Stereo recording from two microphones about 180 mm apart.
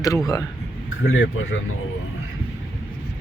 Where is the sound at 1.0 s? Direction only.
90° left.